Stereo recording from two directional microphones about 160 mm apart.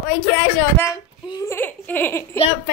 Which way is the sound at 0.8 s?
25° left (ahead or behind).